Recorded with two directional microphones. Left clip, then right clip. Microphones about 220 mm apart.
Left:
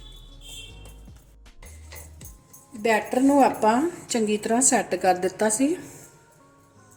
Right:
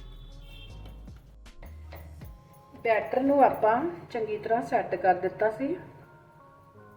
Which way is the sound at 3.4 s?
50° left (ahead or behind).